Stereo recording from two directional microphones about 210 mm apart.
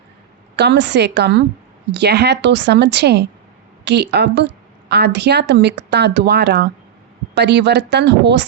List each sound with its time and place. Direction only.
0.5 s speech: 55° right (ahead or behind)